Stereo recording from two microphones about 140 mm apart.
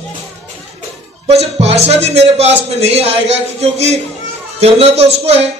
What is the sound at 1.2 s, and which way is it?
A man's voice, 50° right (ahead or behind).